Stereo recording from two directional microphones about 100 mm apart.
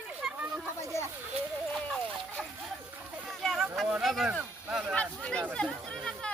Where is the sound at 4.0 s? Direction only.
Centre (ahead or behind).